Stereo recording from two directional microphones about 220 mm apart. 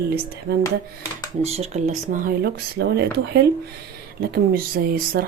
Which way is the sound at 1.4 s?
30° right (ahead or behind).